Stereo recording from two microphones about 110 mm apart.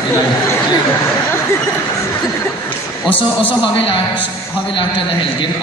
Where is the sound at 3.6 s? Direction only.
55° left (ahead or behind).